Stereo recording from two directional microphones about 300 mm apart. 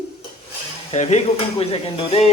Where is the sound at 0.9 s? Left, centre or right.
Left.